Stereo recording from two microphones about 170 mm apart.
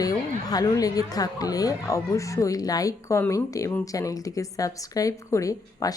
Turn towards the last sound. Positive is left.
turn(degrees=20)  # may be behind; listen again after turning